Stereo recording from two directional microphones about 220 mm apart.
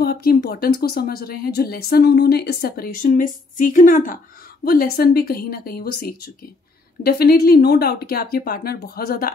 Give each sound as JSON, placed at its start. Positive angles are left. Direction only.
{"t": 0.0, "sound": "speech", "side_deg": 45}